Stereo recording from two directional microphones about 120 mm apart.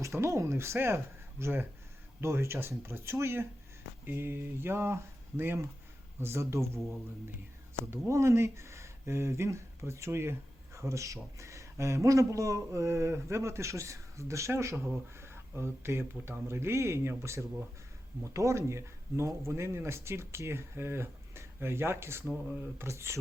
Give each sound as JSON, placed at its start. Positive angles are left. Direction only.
{"t": 0.0, "sound": "speech", "side_deg": -25}
{"t": 6.7, "sound": "speech", "side_deg": 0}
{"t": 7.9, "sound": "speech", "side_deg": -20}